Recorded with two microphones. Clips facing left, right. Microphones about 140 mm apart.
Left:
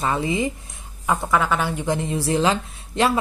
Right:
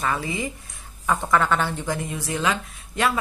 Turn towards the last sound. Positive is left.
turn(degrees=30)  # may be behind; listen again after turning